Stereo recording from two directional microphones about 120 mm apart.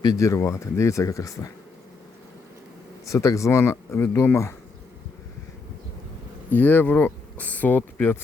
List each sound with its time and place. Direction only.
0.0 s speech: 30° left (ahead or behind)
3.1 s speech: 25° left (ahead or behind)
6.5 s speech: 15° left (ahead or behind)